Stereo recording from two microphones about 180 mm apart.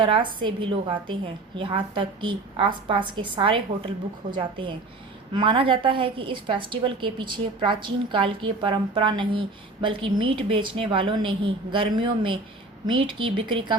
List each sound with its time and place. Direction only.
0.0 s a woman's voice: 25° right (ahead or behind)